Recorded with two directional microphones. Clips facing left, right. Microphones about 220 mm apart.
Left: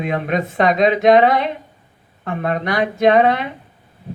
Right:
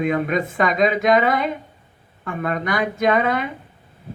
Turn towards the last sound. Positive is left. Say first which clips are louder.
# left 5 dB
turn(degrees=-45)  # may be behind; listen again after turning